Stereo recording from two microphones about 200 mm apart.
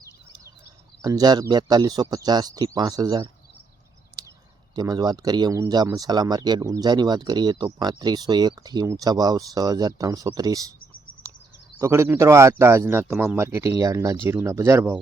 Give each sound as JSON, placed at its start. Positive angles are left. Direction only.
{"t": 1.0, "sound": "speech", "side_deg": -20}
{"t": 4.7, "sound": "speech", "side_deg": -20}
{"t": 11.8, "sound": "speech", "side_deg": -15}